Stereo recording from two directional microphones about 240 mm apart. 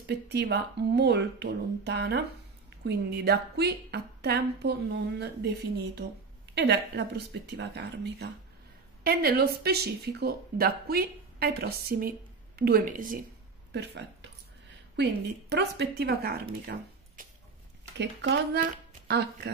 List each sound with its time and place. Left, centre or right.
0.0 s speech: right
13.7 s a sound: right
15.5 s speech: right
17.9 s speech: right